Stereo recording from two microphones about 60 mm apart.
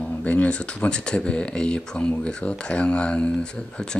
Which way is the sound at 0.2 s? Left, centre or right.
Left.